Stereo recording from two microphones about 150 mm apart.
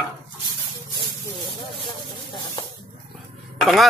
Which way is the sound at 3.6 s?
Centre (ahead or behind).